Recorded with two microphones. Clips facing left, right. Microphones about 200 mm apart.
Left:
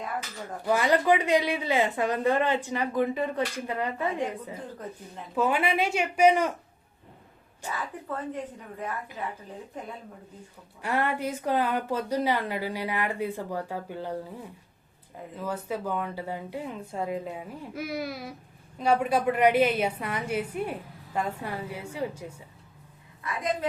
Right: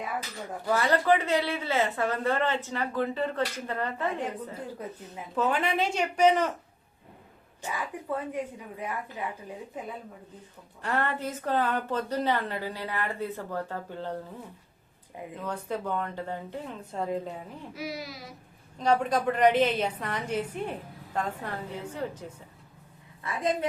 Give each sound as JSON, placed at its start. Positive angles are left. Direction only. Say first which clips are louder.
{"t": 0.6, "sound": "a woman's voice", "louder": "left 2 dB", "side_deg": 15}
{"t": 5.3, "sound": "a woman's voice", "louder": "left 2 dB", "side_deg": 10}
{"t": 7.6, "sound": "a woman's voice", "louder": "even", "side_deg": -10}
{"t": 9.7, "sound": "speech", "louder": "right 1 dB", "side_deg": 0}
{"t": 10.8, "sound": "a woman's voice", "louder": "left 2 dB", "side_deg": 10}
{"t": 15.4, "sound": "a woman's voice", "louder": "left 2 dB", "side_deg": 5}
{"t": 17.7, "sound": "speech", "louder": "left 5 dB", "side_deg": 55}
{"t": 18.8, "sound": "a woman's voice", "louder": "left 1 dB", "side_deg": 10}
{"t": 23.2, "sound": "a woman's voice", "louder": "right 1 dB", "side_deg": -30}